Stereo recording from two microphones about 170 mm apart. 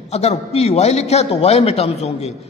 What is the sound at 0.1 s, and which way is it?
A man's voice, 40° left (ahead or behind).